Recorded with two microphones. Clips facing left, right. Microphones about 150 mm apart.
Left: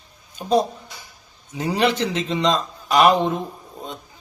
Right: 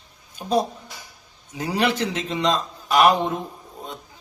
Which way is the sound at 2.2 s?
5° right (ahead or behind).